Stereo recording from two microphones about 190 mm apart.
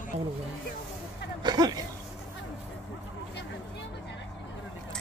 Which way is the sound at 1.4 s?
20° right (ahead or behind).